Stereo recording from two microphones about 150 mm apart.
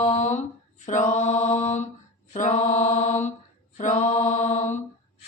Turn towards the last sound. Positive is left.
turn(degrees=50)  # may be behind; listen again after turning